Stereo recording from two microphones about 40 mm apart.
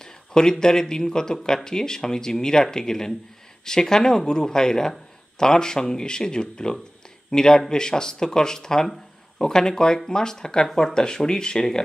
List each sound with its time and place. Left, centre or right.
0.0 s speech: centre
10.7 s speech: centre
11.0 s speech: centre